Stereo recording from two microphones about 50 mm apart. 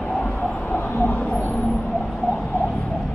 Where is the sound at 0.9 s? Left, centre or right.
Left.